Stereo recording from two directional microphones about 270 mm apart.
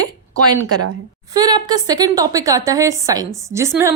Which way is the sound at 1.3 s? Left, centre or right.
Centre.